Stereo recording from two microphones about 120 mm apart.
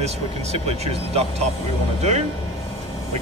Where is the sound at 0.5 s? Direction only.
65° right (ahead or behind).